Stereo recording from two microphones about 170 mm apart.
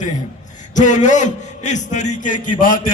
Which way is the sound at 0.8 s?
45° left (ahead or behind).